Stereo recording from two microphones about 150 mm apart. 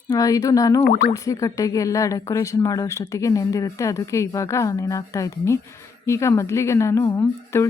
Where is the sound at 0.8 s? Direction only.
90° left.